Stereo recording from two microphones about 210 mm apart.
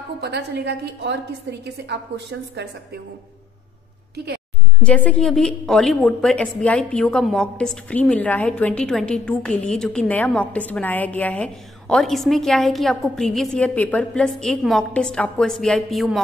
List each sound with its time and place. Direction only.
0.2 s a woman's voice: 55° right (ahead or behind)
4.8 s a woman's voice: 5° left (ahead or behind)